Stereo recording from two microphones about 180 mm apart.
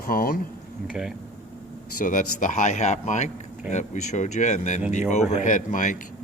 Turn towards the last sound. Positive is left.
turn(degrees=45)  # may be behind; listen again after turning